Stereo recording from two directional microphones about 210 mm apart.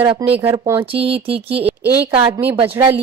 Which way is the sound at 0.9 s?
25° right (ahead or behind).